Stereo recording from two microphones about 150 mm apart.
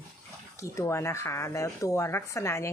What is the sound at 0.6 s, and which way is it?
Speech, 20° left (ahead or behind).